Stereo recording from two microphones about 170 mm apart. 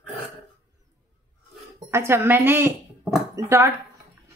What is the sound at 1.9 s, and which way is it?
Speech, 15° right (ahead or behind).